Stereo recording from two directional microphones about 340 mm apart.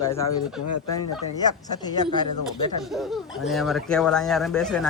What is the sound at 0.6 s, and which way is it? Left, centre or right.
Speech, left.